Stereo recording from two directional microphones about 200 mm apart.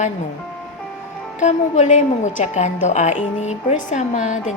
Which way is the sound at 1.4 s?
35° left (ahead or behind).